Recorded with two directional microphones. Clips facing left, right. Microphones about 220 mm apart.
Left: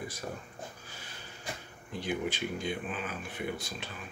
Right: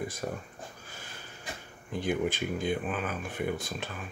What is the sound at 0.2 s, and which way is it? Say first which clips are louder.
Speech: right 4 dB; 55° right (ahead or behind).